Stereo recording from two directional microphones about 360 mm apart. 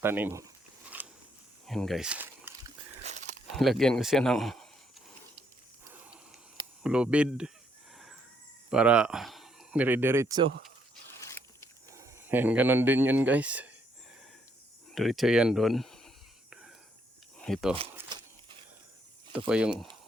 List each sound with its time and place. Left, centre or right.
0.0 s speech: centre
0.9 s a sound: centre
1.6 s snake: centre
3.1 s a sound: centre
3.5 s speech: centre
6.8 s speech: centre
8.7 s speech: centre
11.2 s a sound: centre
11.9 s speech: centre
14.9 s speech: centre
17.4 s speech: centre
17.7 s a sound: centre
19.5 s speech: centre